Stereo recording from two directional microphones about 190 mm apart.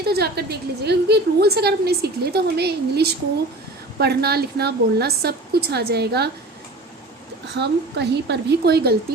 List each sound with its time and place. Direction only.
0.0 s a woman's voice: 55° right (ahead or behind)
7.5 s a woman's voice: 65° right (ahead or behind)